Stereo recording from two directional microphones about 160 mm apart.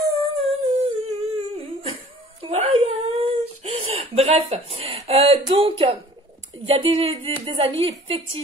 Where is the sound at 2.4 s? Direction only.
35° right (ahead or behind).